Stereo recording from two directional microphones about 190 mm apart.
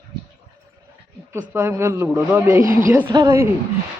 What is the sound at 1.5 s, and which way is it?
Speech, 15° right (ahead or behind).